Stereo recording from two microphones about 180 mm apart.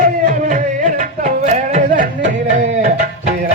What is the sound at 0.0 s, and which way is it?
Music, 45° right (ahead or behind).